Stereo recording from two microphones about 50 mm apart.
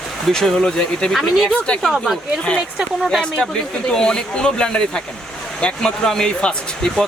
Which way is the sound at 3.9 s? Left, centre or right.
Centre.